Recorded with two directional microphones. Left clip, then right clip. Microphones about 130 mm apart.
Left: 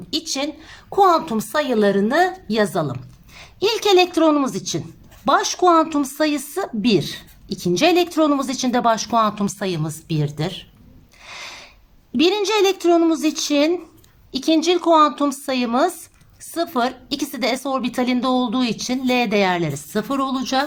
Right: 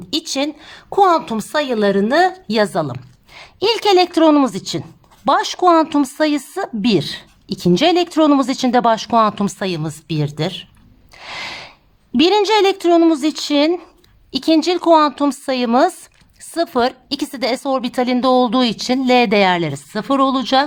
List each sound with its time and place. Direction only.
0.1 s a woman's voice: 60° right (ahead or behind)
11.2 s snort: 50° right (ahead or behind)
12.1 s a woman's voice: 50° right (ahead or behind)